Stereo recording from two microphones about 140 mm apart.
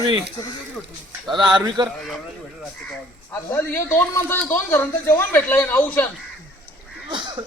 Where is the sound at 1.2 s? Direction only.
35° right (ahead or behind).